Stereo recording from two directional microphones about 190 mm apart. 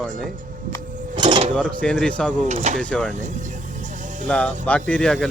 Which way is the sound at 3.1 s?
40° right (ahead or behind).